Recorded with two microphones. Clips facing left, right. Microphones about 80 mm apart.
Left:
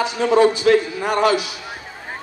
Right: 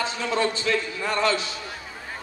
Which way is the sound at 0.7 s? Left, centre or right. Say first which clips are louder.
Left 9 dB; left.